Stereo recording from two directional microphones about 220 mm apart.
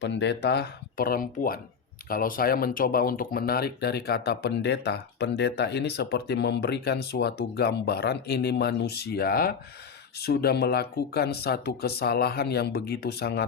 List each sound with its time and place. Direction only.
0.0 s speech: 50° left (ahead or behind)